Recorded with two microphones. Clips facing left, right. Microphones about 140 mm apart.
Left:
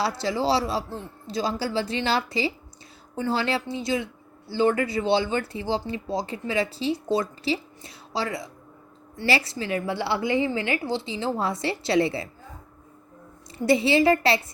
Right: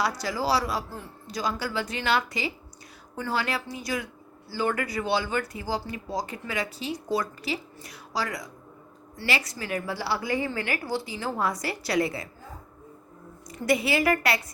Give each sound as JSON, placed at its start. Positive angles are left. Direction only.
{"t": 0.0, "sound": "speech", "side_deg": 25}
{"t": 13.5, "sound": "speech", "side_deg": 30}